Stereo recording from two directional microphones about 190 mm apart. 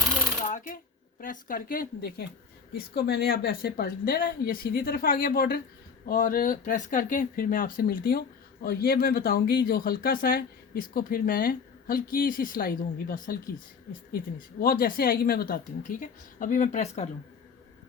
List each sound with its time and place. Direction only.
0.4 s coin: 40° left (ahead or behind)
1.2 s speech: 45° left (ahead or behind)
14.6 s speech: 50° left (ahead or behind)